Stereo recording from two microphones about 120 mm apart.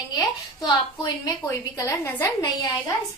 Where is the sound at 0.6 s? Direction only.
35° left (ahead or behind).